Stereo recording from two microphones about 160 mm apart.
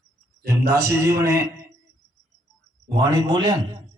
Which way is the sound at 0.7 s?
15° right (ahead or behind).